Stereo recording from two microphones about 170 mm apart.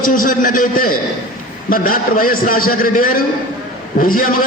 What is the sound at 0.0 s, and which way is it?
A man's voice, 55° left (ahead or behind).